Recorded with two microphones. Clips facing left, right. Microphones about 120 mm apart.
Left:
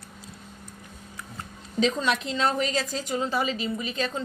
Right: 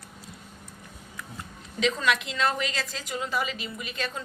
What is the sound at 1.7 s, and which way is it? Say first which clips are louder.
A woman's voice: left 1 dB; 35° left (ahead or behind).